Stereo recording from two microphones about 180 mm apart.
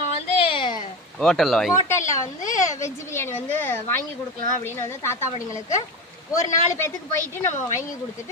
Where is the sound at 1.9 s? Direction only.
15° left (ahead or behind).